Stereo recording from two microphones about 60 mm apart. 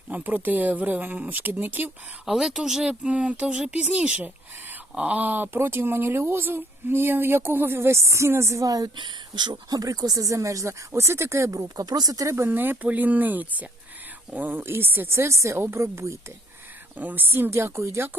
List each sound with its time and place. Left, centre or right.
0.1 s speech: right
2.2 s speech: centre; by 5.5 s right
5.5 s speech: right
8.6 s a woman's voice: right
12.5 s speech: right
17.0 s speech: right
17.5 s speech: right